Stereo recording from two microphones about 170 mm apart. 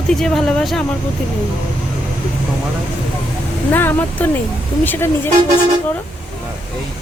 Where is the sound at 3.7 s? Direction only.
10° left (ahead or behind).